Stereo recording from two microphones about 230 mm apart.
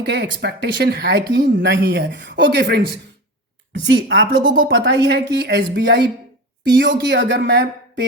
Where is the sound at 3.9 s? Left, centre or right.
Right.